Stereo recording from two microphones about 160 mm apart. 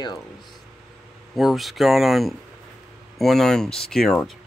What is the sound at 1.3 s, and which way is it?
Speech, centre (ahead or behind).